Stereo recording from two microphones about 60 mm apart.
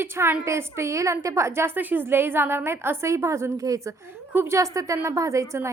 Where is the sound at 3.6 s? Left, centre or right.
Right.